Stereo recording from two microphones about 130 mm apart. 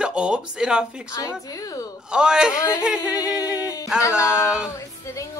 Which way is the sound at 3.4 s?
25° left (ahead or behind).